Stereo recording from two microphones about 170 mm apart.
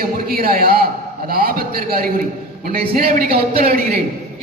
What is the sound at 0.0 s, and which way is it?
A man's voice, 60° right (ahead or behind).